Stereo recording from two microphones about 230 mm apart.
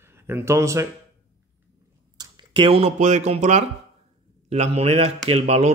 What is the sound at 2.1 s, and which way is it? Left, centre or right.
A man's voice, centre.